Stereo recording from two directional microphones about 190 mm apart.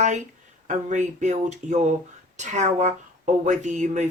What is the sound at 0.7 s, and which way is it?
Speech, 40° right (ahead or behind).